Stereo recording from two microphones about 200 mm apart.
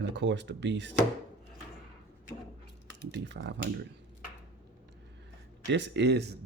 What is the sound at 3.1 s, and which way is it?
Speech, 60° right (ahead or behind).